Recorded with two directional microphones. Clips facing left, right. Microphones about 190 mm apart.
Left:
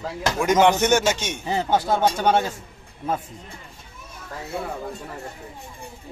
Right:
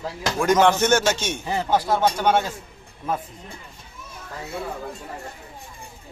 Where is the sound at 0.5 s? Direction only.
15° left (ahead or behind).